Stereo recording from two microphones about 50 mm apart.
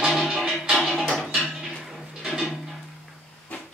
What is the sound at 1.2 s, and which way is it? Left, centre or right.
Dishes, centre.